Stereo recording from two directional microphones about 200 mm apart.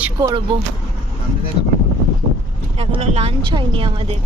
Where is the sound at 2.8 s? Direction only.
30° right (ahead or behind).